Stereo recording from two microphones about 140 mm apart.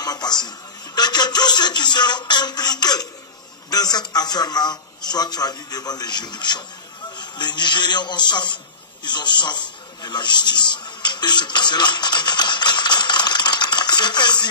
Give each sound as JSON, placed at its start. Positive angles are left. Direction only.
{"t": 0.0, "sound": "a man's voice", "side_deg": 30}